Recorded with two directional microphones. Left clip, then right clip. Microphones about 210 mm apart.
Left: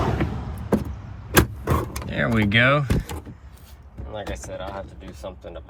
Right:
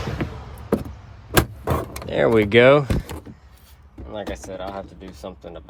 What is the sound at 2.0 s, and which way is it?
Speech, 30° right (ahead or behind).